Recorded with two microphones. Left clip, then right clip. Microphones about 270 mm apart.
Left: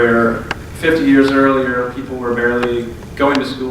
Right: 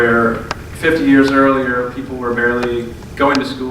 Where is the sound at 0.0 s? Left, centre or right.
Centre.